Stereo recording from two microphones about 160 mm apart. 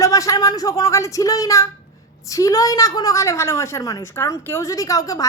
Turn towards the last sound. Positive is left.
turn(degrees=20)  # may be behind; listen again after turning